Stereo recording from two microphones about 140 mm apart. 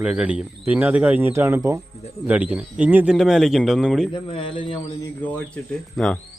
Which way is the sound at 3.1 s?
Centre (ahead or behind).